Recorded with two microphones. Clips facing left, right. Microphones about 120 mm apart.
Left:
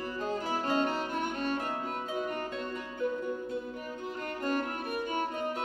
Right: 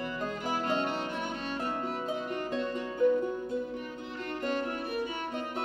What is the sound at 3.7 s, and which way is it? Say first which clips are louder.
Music: even; 40° left (ahead or behind).